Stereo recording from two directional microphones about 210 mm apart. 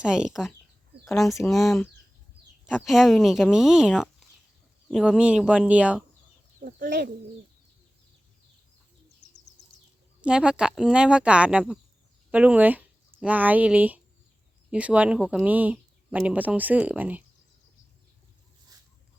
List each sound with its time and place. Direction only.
0.0 s speech: 5° right (ahead or behind)
6.6 s speech: 40° right (ahead or behind)
10.2 s speech: 5° right (ahead or behind)